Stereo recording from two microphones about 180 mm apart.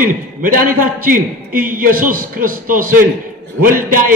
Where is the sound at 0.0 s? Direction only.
50° right (ahead or behind).